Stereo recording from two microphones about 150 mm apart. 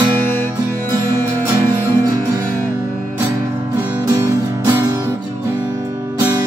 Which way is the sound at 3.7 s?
10° right (ahead or behind).